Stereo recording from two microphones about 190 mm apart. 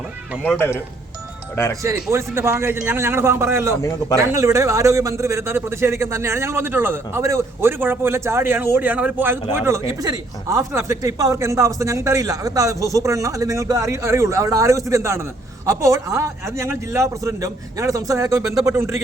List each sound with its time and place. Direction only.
1.8 s speech: 15° right (ahead or behind)